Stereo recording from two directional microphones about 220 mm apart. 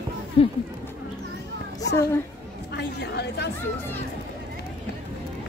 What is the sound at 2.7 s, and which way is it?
Speech, 50° left (ahead or behind).